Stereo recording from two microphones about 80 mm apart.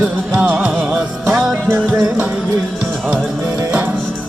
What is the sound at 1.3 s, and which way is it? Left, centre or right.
Music, centre.